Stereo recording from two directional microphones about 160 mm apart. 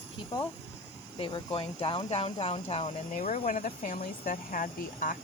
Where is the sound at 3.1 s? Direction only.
50° left (ahead or behind).